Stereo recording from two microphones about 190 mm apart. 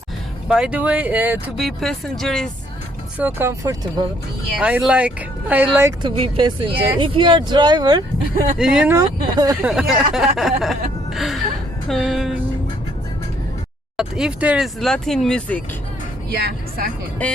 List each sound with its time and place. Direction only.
0.4 s speech: 5° right (ahead or behind)
3.2 s speech: 10° right (ahead or behind)
4.5 s speech: 5° right (ahead or behind)
6.0 s speech: 25° right (ahead or behind)
8.5 s speech: 5° right (ahead or behind)
9.0 s speech: 20° right (ahead or behind)
9.6 s speech: 5° right (ahead or behind)
13.9 s speech: 5° right (ahead or behind)
16.3 s speech: 60° right (ahead or behind)
17.2 s speech: 10° left (ahead or behind)